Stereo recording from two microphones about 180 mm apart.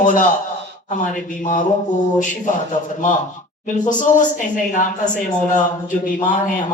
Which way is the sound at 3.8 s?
45° left (ahead or behind).